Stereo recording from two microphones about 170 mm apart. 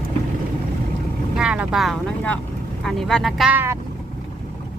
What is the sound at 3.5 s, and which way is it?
Speech, 15° right (ahead or behind).